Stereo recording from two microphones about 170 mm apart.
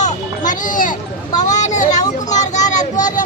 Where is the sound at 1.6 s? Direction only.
45° left (ahead or behind).